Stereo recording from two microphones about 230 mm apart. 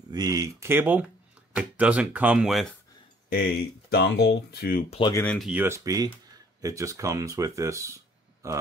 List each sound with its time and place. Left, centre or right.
0.1 s speech: centre
3.3 s speech: left
5.1 s speech: centre